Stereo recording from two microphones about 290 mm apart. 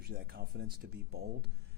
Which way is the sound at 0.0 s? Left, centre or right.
Right.